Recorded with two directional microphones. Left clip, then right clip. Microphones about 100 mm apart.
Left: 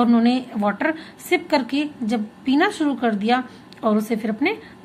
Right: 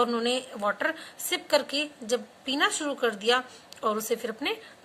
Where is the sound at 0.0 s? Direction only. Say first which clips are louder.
Left 6 dB; 35° right (ahead or behind).